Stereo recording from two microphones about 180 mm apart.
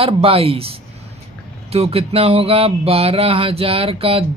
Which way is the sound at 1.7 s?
35° right (ahead or behind).